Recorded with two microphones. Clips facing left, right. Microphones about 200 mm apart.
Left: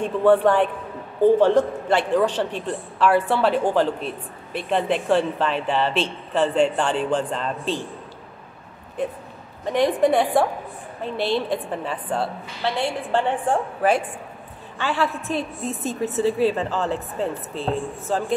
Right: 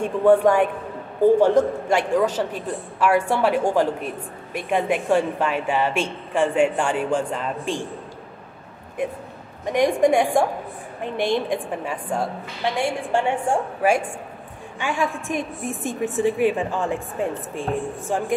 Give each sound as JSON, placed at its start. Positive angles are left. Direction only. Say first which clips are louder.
{"t": 0.0, "sound": "a woman's voice", "louder": "right 1 dB", "side_deg": -10}
{"t": 9.7, "sound": "a woman's voice", "louder": "right 1 dB", "side_deg": -15}